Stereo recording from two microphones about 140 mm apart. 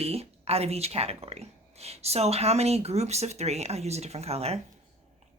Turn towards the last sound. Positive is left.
turn(degrees=-45)  # may be behind; listen again after turning